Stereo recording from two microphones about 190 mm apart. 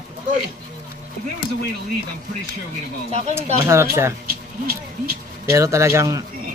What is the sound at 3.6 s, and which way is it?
Speech, 15° right (ahead or behind).